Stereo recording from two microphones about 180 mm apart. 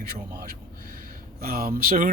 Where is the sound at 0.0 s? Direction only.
55° right (ahead or behind).